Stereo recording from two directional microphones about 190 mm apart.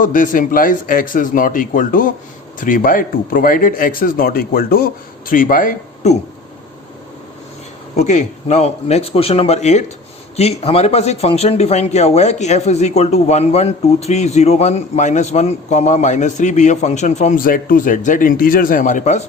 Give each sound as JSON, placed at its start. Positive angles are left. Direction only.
{"t": 0.0, "sound": "a man's voice", "side_deg": 45}
{"t": 7.9, "sound": "speech", "side_deg": 35}